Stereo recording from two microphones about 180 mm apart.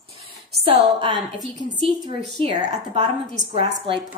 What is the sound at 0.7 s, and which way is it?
A woman's voice, 30° right (ahead or behind).